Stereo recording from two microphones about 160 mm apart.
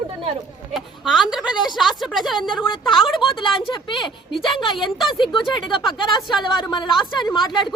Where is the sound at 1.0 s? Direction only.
5° right (ahead or behind).